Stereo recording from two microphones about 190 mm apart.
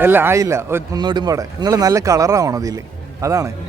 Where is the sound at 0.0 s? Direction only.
10° right (ahead or behind).